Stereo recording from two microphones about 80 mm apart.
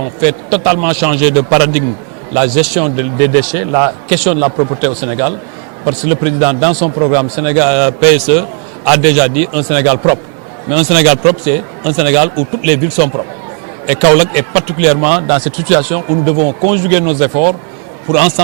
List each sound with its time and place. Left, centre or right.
0.0 s speech: centre